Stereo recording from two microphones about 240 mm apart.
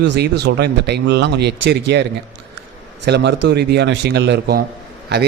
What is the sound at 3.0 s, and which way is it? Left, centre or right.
Speech, right.